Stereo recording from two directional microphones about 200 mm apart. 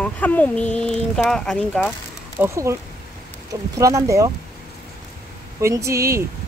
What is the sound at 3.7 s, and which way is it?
Speech, 15° right (ahead or behind).